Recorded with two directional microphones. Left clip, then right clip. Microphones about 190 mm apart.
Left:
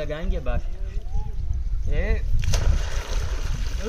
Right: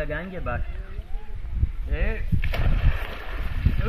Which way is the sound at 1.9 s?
35° left (ahead or behind).